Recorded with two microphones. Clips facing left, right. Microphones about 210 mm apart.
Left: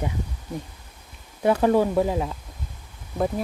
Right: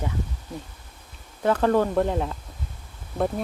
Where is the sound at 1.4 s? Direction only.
10° left (ahead or behind).